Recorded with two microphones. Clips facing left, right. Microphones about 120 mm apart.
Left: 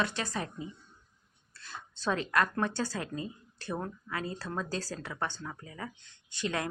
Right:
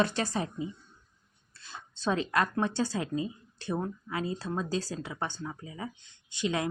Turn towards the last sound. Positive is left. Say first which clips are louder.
# right 3 dB
turn(degrees=-20)  # may be behind; listen again after turning